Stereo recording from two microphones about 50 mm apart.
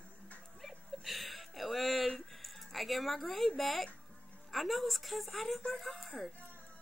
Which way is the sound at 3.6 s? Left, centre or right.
Centre.